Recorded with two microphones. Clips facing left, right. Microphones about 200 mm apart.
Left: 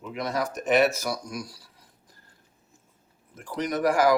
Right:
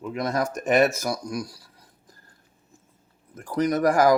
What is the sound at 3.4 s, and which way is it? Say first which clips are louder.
Speech: right 5 dB; 40° right (ahead or behind).